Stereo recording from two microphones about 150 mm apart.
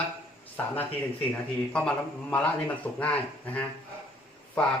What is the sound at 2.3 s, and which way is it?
Speech, 10° left (ahead or behind).